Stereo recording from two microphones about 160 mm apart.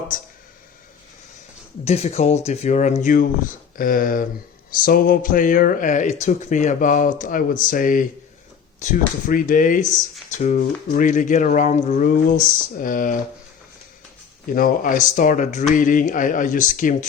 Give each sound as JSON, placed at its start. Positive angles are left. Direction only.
{"t": 1.8, "sound": "speech", "side_deg": 45}
{"t": 14.5, "sound": "speech", "side_deg": 60}